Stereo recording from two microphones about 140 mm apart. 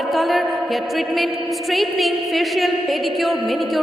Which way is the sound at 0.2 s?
Centre (ahead or behind).